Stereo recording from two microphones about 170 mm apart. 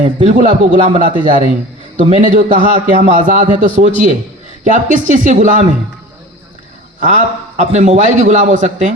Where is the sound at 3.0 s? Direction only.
50° right (ahead or behind).